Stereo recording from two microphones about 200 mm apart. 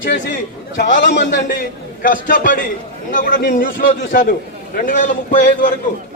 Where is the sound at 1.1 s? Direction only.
60° left (ahead or behind).